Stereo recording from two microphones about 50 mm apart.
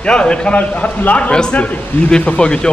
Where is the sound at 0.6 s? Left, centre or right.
Left.